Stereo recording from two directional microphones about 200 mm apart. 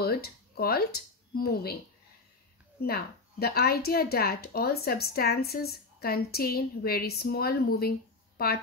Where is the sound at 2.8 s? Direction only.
50° left (ahead or behind).